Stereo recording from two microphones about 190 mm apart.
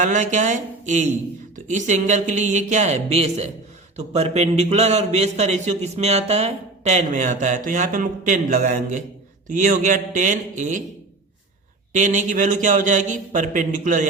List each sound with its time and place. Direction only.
0.0 s a man's voice: 40° right (ahead or behind)
11.9 s a man's voice: 40° right (ahead or behind)